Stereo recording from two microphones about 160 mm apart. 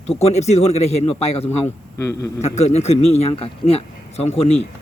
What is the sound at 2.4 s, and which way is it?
A man's voice, 45° left (ahead or behind).